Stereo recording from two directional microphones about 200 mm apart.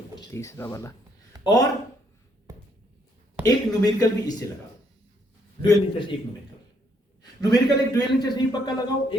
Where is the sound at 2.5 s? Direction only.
15° right (ahead or behind).